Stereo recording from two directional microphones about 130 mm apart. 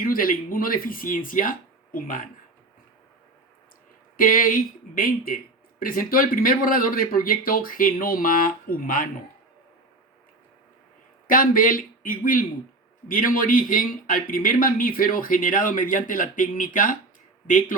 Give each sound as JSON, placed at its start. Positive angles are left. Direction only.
{"t": 0.0, "sound": "a man's voice", "side_deg": 90}
{"t": 4.2, "sound": "a man's voice", "side_deg": 90}
{"t": 11.3, "sound": "a man's voice", "side_deg": 90}